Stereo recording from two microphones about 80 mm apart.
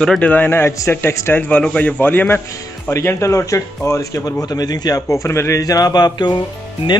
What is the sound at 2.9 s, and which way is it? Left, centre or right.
A man's voice, left.